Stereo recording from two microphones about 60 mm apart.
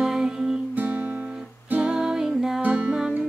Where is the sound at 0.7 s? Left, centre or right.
Right.